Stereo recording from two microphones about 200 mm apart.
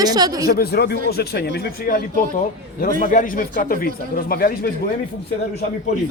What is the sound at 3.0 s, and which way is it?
Speech, 40° left (ahead or behind).